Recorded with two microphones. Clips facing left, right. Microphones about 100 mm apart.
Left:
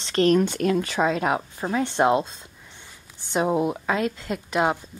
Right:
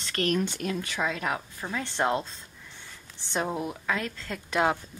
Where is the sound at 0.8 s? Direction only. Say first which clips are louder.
Left 8 dB; 35° left (ahead or behind); by 2.3 s 20° left (ahead or behind).